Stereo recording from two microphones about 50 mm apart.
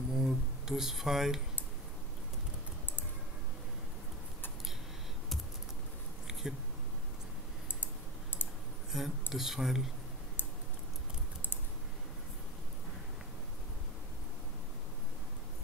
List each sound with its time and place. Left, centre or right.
0.1 s a sound: centre
6.4 s speech: centre
7.8 s computer keyboard: left
8.9 s speech: centre